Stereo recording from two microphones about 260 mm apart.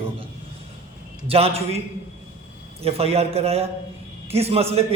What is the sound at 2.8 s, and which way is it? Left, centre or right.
A man's voice, right.